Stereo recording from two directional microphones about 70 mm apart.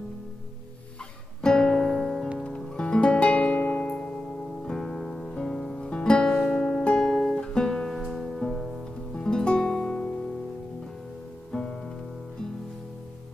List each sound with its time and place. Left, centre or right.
1.4 s music: centre
8.0 s music: centre
11.5 s music: centre